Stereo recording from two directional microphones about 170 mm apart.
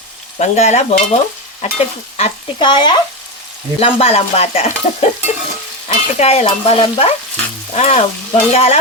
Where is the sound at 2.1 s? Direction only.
30° left (ahead or behind).